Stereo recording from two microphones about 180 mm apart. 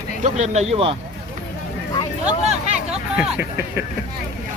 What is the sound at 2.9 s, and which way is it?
Speech, 5° right (ahead or behind).